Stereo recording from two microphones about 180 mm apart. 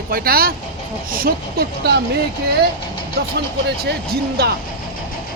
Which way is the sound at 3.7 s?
65° right (ahead or behind).